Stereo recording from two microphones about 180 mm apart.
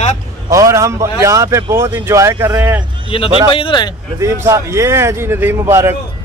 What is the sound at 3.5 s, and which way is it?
Speech, 25° left (ahead or behind).